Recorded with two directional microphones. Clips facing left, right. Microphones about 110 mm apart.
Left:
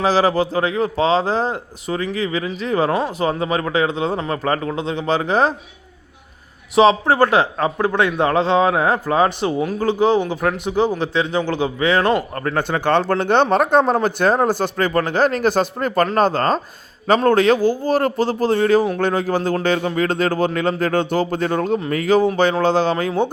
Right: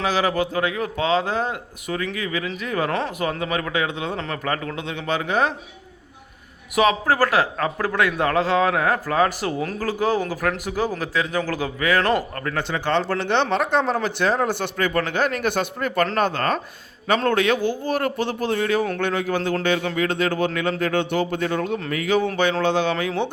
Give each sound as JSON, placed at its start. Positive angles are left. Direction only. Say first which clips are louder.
{"t": 0.0, "sound": "a man's voice", "louder": "left 5 dB", "side_deg": 35}
{"t": 6.7, "sound": "a man's voice", "louder": "left 5 dB", "side_deg": 25}
{"t": 12.5, "sound": "a man's voice", "louder": "left 5 dB", "side_deg": 50}